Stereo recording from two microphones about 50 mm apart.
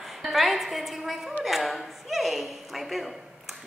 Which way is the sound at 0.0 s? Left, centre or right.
Centre.